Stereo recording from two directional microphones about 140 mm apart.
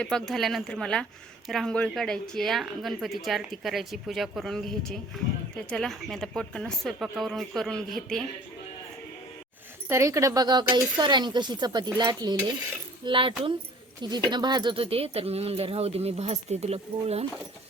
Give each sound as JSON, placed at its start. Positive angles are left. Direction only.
{"t": 0.0, "sound": "speech", "side_deg": 5}
{"t": 9.9, "sound": "speech", "side_deg": -20}